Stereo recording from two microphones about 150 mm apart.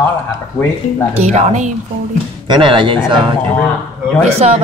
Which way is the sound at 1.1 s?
50° right (ahead or behind).